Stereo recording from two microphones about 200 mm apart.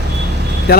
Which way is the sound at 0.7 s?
50° left (ahead or behind).